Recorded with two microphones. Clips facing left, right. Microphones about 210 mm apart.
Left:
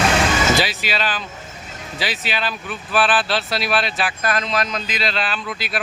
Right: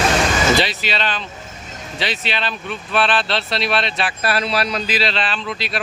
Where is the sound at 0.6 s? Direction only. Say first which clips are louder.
Right 1 dB; centre (ahead or behind).